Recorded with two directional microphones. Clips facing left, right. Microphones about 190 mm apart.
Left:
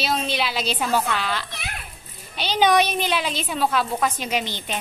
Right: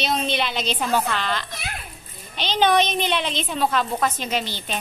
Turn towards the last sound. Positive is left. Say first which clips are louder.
# even
turn(degrees=15)  # may be behind; listen again after turning